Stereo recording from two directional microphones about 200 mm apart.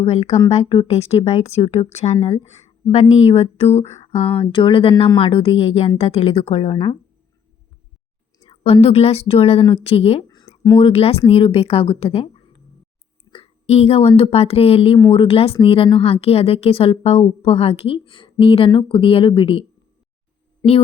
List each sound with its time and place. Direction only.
0.0 s a woman's voice: 30° left (ahead or behind)
8.4 s a woman's voice: 30° left (ahead or behind)
10.2 s a sound: 15° left (ahead or behind)
10.8 s a woman's voice: 30° left (ahead or behind)
13.3 s a sound: 30° left (ahead or behind)
14.1 s a woman's voice: 30° left (ahead or behind)